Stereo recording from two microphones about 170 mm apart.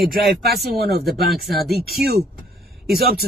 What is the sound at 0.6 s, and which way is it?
Speech, 65° right (ahead or behind).